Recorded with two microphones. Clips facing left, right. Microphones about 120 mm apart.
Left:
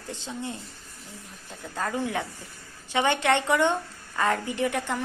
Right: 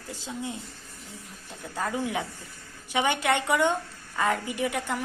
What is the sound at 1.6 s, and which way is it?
A woman's voice, 15° right (ahead or behind).